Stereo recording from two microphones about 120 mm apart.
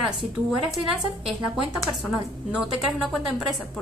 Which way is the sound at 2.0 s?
5° right (ahead or behind).